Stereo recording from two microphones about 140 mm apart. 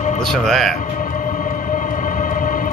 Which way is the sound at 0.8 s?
65° left (ahead or behind).